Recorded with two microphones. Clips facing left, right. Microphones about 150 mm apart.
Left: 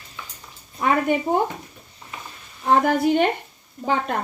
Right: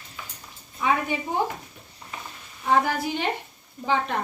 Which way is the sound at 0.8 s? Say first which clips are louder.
Left 4 dB; 55° left (ahead or behind).